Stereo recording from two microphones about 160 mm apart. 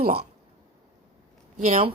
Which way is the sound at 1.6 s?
40° right (ahead or behind).